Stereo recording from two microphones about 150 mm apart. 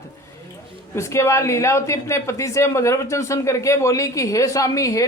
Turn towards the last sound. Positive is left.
turn(degrees=20)  # may be behind; listen again after turning